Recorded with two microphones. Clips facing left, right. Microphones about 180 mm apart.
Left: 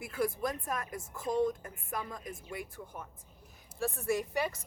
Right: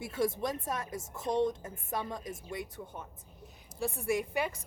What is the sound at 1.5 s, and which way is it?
Speech, 20° right (ahead or behind).